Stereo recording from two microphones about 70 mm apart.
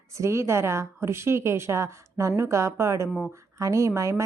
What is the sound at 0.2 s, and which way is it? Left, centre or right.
A woman's voice, right.